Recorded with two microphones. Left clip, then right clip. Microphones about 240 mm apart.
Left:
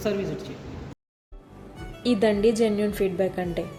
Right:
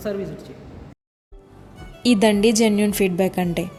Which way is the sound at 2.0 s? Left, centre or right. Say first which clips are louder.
Right 4 dB; right.